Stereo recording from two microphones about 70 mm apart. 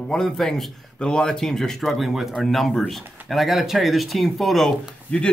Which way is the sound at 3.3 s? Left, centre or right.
Centre.